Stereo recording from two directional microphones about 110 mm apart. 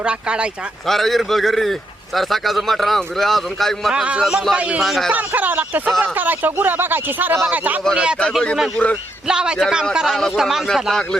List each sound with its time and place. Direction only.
0.0 s speech: 10° right (ahead or behind)
0.9 s speech: centre (ahead or behind)
5.1 s speech: 15° right (ahead or behind)
8.2 s speech: 5° left (ahead or behind)